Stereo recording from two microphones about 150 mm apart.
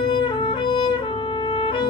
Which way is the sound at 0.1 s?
30° left (ahead or behind).